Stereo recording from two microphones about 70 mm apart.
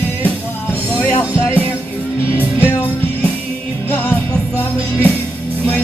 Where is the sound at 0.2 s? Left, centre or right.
Left.